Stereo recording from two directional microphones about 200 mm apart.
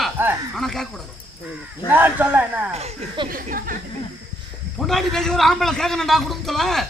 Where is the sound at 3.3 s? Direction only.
45° right (ahead or behind).